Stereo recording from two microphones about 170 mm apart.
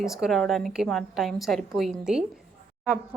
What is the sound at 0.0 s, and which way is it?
A woman's voice, centre (ahead or behind).